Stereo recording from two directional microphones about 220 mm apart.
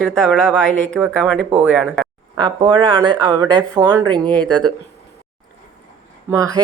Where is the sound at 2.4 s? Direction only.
20° right (ahead or behind).